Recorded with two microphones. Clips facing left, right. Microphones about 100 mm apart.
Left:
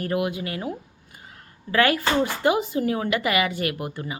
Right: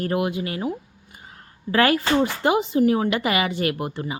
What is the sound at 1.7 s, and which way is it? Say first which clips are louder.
A woman's voice: right 2 dB; 30° right (ahead or behind).